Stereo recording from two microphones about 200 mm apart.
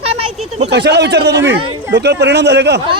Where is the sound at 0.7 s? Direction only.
60° right (ahead or behind).